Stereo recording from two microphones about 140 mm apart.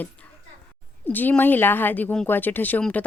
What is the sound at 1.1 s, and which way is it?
A woman's voice, 15° left (ahead or behind).